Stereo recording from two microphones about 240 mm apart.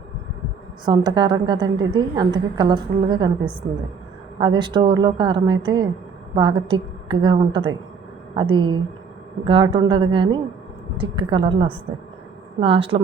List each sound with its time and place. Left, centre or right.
0.9 s a woman's voice: centre